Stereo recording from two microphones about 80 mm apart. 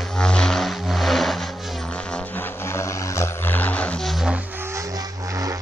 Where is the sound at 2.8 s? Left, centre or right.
Left; by 4.0 s centre.